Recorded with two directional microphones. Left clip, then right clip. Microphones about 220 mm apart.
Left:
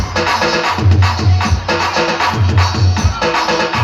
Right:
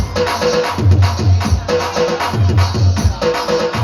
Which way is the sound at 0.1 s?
55° right (ahead or behind).